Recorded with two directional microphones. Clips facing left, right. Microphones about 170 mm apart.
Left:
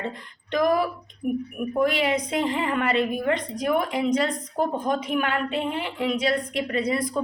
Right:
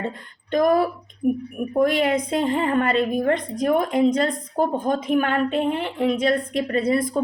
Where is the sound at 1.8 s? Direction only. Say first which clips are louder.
Right 3 dB; 50° right (ahead or behind).